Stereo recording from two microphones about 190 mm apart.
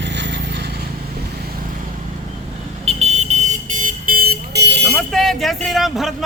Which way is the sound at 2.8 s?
35° right (ahead or behind).